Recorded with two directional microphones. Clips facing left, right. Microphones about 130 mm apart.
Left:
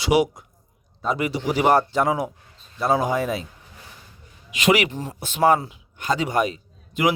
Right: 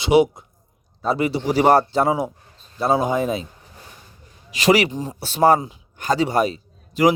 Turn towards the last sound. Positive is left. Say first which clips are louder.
# right 5 dB
turn(degrees=-35)  # may be behind; listen again after turning